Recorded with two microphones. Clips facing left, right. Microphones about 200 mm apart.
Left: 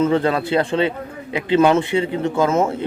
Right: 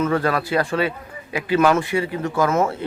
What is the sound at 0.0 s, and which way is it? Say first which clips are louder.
A man's voice: left 3 dB; 25° left (ahead or behind).